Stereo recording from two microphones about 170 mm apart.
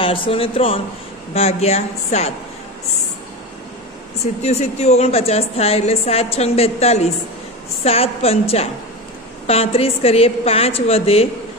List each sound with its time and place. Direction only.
0.0 s a woman's voice: 30° left (ahead or behind)
4.2 s a woman's voice: 40° left (ahead or behind)